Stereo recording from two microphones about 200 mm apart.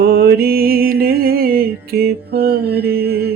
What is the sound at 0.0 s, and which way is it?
Mantra, 50° right (ahead or behind).